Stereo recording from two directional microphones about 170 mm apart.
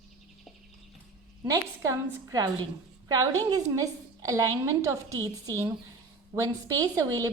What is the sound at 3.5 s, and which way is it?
A woman's voice, 20° right (ahead or behind).